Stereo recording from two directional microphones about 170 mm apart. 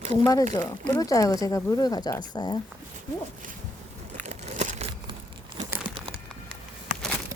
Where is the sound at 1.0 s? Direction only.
20° left (ahead or behind).